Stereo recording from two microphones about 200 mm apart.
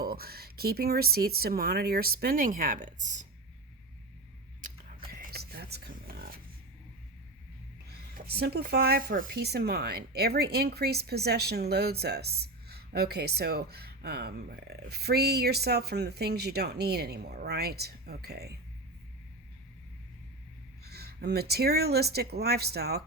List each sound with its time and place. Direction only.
0.0 s speech: 50° right (ahead or behind)
4.6 s a sound: 45° right (ahead or behind)
7.9 s speech: 50° right (ahead or behind)
20.8 s speech: 50° right (ahead or behind)